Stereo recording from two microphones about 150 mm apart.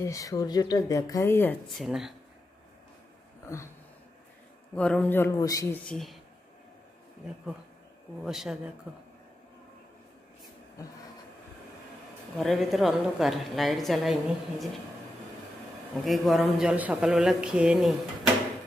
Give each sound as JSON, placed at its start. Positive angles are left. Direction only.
{"t": 0.0, "sound": "speech", "side_deg": 20}
{"t": 1.7, "sound": "a man's voice", "side_deg": 0}
{"t": 3.4, "sound": "a sound", "side_deg": 20}
{"t": 4.7, "sound": "speech", "side_deg": 10}
{"t": 5.9, "sound": "a man's voice", "side_deg": 0}
{"t": 8.2, "sound": "a man's voice", "side_deg": -5}
{"t": 12.4, "sound": "a man's voice", "side_deg": 0}
{"t": 16.0, "sound": "a man's voice", "side_deg": 0}